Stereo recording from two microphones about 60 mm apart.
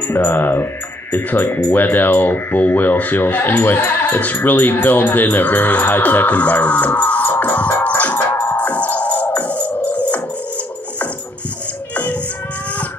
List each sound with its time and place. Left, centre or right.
0.1 s speech: left
8.5 s music: left
9.8 s dog: left
11.9 s music: left